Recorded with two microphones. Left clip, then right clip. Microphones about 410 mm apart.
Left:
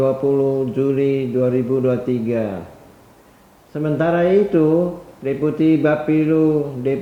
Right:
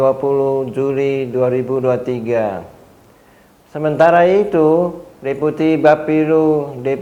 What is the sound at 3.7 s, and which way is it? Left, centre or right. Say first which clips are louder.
A man's voice: right 7 dB; right.